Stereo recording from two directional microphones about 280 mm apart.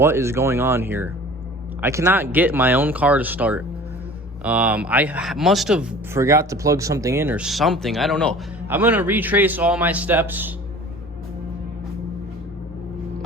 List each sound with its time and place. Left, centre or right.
0.0 s a man's voice: centre